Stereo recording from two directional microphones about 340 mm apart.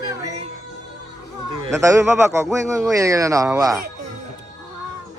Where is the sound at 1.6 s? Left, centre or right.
Centre.